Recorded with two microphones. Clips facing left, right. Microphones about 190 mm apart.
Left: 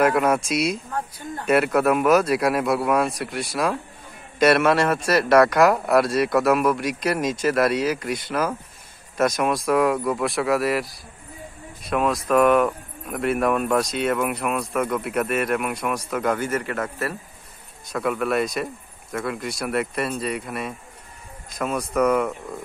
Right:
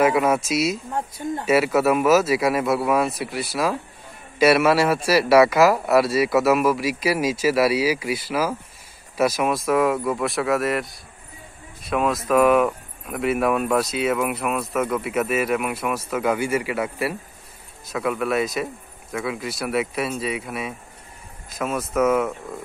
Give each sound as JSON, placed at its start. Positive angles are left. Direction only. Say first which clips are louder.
{"t": 0.0, "sound": "speech", "louder": "right 1 dB", "side_deg": 0}
{"t": 0.9, "sound": "speech", "louder": "right 4 dB", "side_deg": -25}
{"t": 1.4, "sound": "speech", "louder": "even", "side_deg": -5}